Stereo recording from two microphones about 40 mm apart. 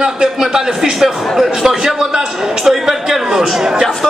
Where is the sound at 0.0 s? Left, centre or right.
Centre.